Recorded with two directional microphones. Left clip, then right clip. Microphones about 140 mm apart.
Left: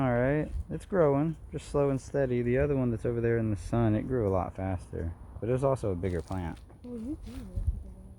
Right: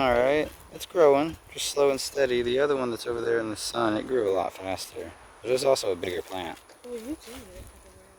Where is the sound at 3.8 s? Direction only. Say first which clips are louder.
Right 5 dB; 20° right (ahead or behind).